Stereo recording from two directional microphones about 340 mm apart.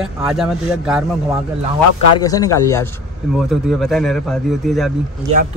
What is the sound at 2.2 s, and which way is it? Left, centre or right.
Speech, centre.